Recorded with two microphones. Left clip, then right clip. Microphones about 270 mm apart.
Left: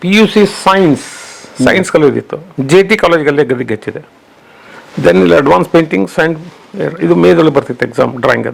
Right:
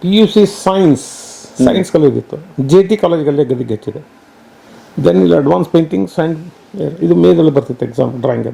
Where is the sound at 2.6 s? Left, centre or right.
Left.